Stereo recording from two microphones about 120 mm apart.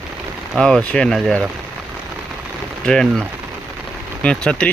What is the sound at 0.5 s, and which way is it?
Speech, 5° left (ahead or behind).